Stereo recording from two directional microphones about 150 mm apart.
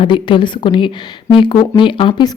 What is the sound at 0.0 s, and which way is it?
Speech, 35° left (ahead or behind).